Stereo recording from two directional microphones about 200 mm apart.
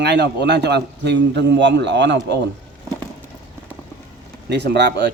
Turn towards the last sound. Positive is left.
turn(degrees=-55)  # may be behind; listen again after turning